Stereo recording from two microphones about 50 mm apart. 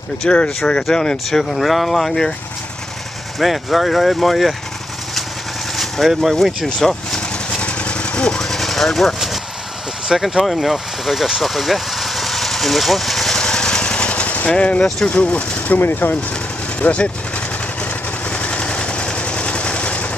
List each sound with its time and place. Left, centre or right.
0.2 s speech: left
1.3 s speech: centre
3.3 s speech: centre
5.8 s speech: centre
6.4 s vehicle: centre
8.5 s vehicle: centre
10.1 s vehicle: centre; by 14.5 s left
14.5 s speech: left
15.8 s speech: left
16.8 s speech: left
18.3 s a sound: left